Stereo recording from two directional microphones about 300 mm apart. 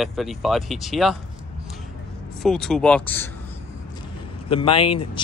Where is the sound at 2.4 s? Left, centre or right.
Centre.